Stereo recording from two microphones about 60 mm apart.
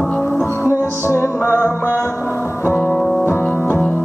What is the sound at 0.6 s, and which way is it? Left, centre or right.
Music, left.